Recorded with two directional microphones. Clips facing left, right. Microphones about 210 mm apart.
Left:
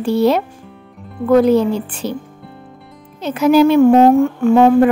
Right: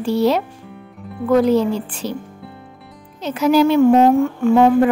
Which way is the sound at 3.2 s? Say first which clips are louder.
Left 3 dB; 55° left (ahead or behind).